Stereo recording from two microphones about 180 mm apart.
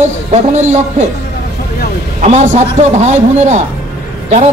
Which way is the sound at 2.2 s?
40° right (ahead or behind).